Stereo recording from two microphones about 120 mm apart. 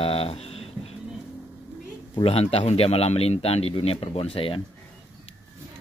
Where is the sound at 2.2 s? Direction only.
55° left (ahead or behind).